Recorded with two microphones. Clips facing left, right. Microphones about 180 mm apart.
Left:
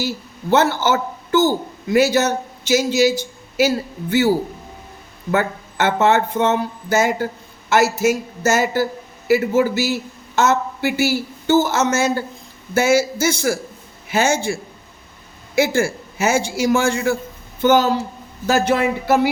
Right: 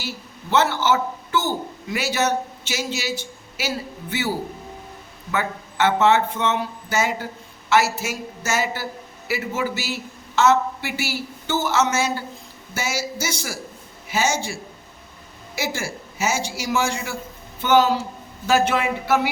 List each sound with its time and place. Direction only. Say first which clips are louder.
0.5 s a man's voice: left 3 dB; 40° left (ahead or behind)
5.3 s a man's voice: left 6 dB; 45° left (ahead or behind)